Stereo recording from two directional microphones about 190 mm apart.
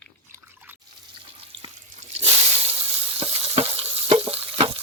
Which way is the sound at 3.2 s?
30° right (ahead or behind).